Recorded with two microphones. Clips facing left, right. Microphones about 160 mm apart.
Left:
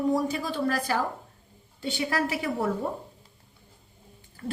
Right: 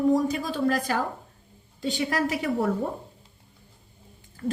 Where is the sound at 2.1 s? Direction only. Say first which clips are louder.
Even; 35° left (ahead or behind).